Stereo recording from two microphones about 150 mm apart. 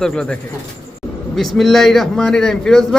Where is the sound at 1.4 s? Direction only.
Centre (ahead or behind).